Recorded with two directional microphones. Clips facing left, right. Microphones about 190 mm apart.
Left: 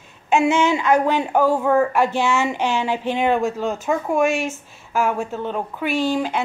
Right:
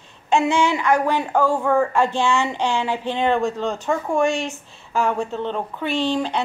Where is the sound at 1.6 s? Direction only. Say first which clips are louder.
Left 1 dB; 5° left (ahead or behind).